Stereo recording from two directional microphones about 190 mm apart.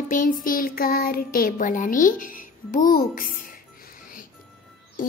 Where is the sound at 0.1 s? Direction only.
45° left (ahead or behind).